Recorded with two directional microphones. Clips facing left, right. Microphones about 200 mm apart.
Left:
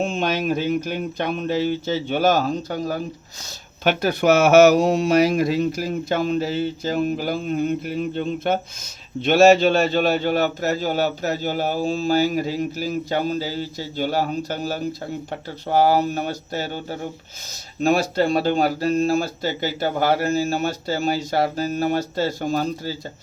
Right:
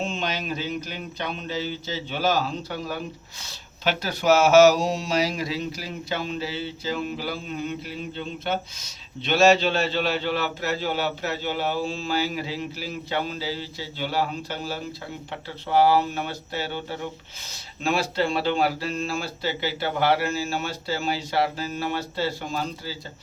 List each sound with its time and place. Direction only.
0.0 s speech: 50° left (ahead or behind)
3.8 s speech: 55° left (ahead or behind)